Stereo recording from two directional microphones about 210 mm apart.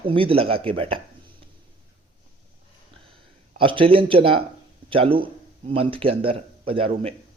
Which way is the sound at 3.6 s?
25° right (ahead or behind).